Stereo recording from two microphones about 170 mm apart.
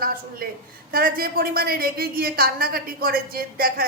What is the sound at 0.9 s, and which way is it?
A woman's voice, 60° right (ahead or behind).